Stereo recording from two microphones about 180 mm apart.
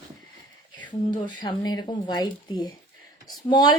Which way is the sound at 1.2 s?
25° left (ahead or behind).